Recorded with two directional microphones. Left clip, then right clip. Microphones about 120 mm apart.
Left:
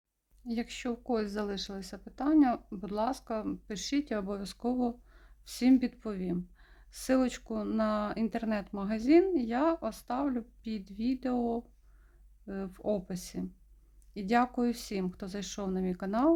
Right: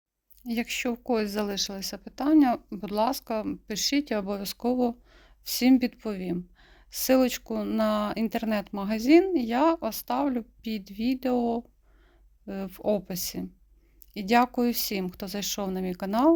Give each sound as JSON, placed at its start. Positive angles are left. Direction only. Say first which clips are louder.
{"t": 0.4, "sound": "speech", "louder": "right 7 dB", "side_deg": -30}